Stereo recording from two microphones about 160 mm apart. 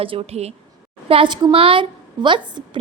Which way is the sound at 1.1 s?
30° right (ahead or behind).